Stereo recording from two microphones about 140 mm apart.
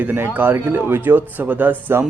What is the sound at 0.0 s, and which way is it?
Speech, 15° right (ahead or behind).